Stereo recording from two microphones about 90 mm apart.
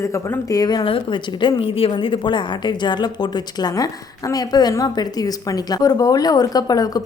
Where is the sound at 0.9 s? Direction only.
70° left (ahead or behind).